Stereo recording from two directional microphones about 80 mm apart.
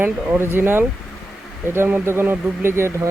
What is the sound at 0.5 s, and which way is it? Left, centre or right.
Speech, right.